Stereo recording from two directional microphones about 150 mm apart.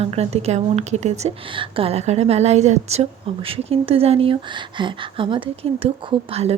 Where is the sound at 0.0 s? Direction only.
45° right (ahead or behind).